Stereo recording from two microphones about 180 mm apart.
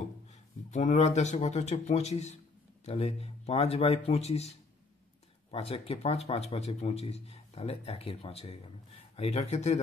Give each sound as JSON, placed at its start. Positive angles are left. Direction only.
{"t": 0.7, "sound": "speech", "side_deg": 40}